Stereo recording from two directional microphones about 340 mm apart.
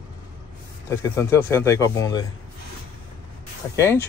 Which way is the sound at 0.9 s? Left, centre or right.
Centre.